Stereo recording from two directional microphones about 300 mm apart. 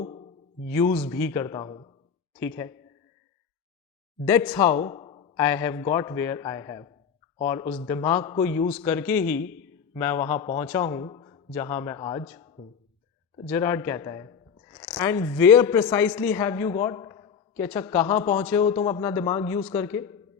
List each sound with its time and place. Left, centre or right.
0.7 s a man's voice: centre
4.3 s speech: centre
5.4 s a man's voice: centre
13.5 s a man's voice: centre